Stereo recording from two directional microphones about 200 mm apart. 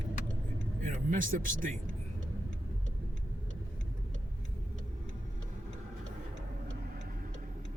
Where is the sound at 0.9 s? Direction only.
40° right (ahead or behind).